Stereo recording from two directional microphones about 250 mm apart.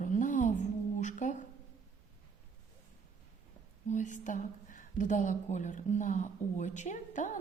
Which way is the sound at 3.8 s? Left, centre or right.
Left.